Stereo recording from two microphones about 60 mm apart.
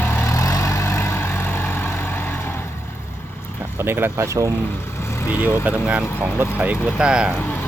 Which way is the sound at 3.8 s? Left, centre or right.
Right.